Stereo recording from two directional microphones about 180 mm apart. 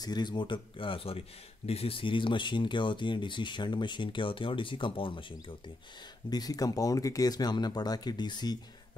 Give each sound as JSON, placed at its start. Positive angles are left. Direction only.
{"t": 0.0, "sound": "speech", "side_deg": 25}
{"t": 6.3, "sound": "speech", "side_deg": 20}